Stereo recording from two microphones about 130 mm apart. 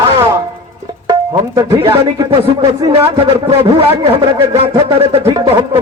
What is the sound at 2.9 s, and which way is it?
Speech, 45° right (ahead or behind).